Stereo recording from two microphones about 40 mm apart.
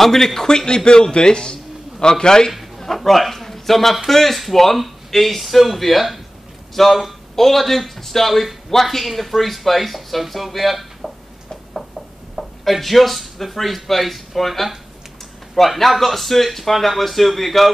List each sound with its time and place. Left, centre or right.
0.0 s a man's voice: centre
2.8 s a man's voice: centre
12.4 s a man's voice: centre